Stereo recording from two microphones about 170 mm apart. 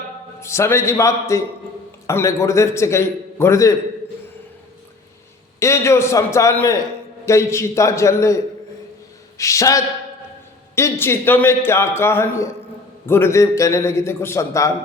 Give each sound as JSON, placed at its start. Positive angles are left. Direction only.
{"t": 0.3, "sound": "a man's voice", "side_deg": 15}
{"t": 5.5, "sound": "a man's voice", "side_deg": 15}
{"t": 9.4, "sound": "a man's voice", "side_deg": 20}